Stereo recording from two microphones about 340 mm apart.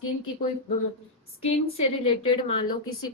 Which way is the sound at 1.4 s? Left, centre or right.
Left.